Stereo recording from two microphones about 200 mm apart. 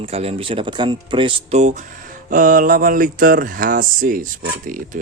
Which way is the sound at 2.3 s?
45° right (ahead or behind).